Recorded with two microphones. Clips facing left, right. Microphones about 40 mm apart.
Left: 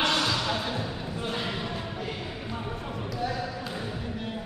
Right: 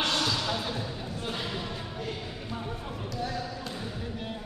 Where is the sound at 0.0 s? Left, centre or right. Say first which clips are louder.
Left 3 dB; centre.